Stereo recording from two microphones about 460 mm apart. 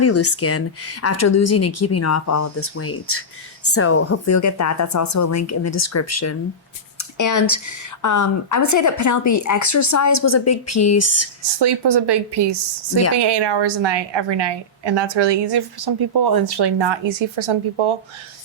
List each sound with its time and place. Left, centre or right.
0.0 s a woman's voice: left
11.6 s a woman's voice: right